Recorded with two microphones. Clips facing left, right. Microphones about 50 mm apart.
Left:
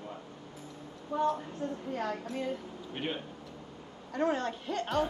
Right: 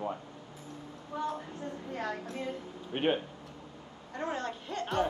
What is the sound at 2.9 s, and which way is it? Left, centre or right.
Speech, right.